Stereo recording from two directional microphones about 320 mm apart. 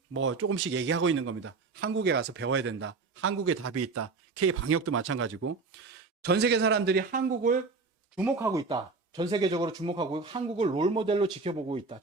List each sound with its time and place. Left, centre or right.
0.1 s a man's voice: right
8.1 s speech: centre